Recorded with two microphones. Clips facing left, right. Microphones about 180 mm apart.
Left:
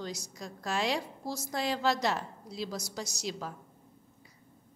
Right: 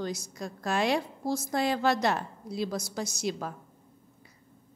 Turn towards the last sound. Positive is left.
turn(degrees=-55)  # may be behind; listen again after turning